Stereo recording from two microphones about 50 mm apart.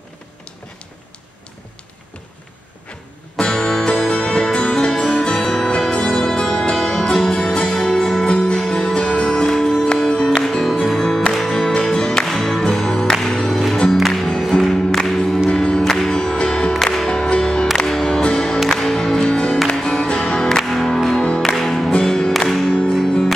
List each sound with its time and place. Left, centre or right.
3.3 s music: centre
20.6 s music: centre